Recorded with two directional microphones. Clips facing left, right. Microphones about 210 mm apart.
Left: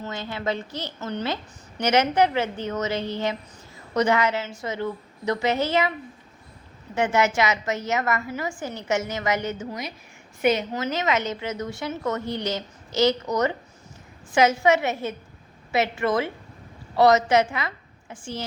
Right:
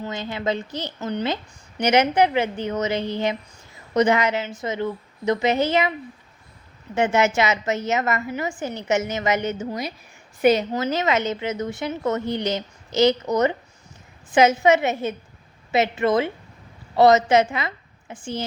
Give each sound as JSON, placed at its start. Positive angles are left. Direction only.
{"t": 0.0, "sound": "a woman's voice", "side_deg": -20}
{"t": 6.9, "sound": "a woman's voice", "side_deg": -25}